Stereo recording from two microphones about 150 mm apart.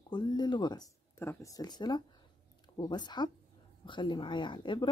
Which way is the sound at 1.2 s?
20° left (ahead or behind).